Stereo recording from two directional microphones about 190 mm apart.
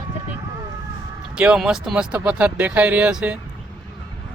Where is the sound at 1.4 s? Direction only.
5° right (ahead or behind).